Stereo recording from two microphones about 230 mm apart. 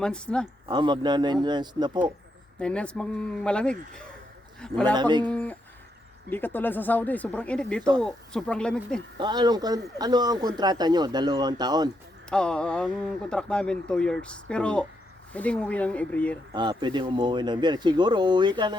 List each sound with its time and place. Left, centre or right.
0.0 s speech: centre
0.7 s speech: centre
2.6 s speech: centre
4.9 s speech: centre
5.2 s speech: centre
9.1 s speech: centre
12.3 s speech: centre
16.5 s speech: centre